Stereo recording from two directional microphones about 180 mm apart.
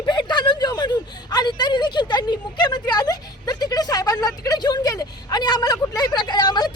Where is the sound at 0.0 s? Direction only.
25° left (ahead or behind).